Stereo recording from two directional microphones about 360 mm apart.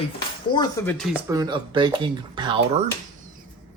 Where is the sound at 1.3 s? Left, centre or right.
Centre.